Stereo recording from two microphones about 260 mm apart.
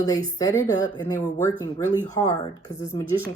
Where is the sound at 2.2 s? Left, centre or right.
Centre.